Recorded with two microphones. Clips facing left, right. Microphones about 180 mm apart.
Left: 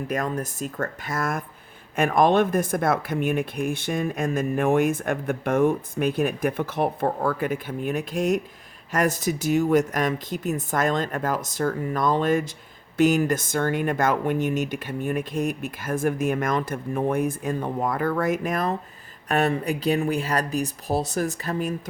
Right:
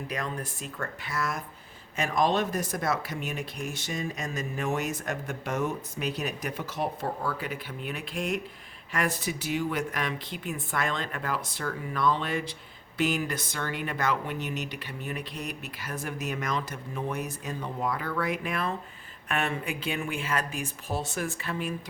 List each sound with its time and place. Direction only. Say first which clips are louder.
0.1 s speech: left 8 dB; 45° left (ahead or behind)